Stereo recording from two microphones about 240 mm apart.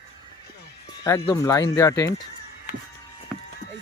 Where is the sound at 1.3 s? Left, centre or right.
Centre.